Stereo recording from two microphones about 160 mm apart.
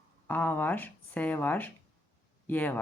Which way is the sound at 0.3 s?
10° left (ahead or behind).